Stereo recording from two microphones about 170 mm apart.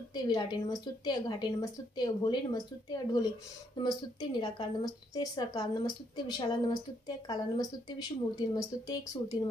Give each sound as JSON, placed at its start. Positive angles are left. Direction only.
{"t": 0.1, "sound": "a woman's voice", "side_deg": 25}